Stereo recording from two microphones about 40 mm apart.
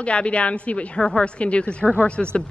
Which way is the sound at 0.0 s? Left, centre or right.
Left.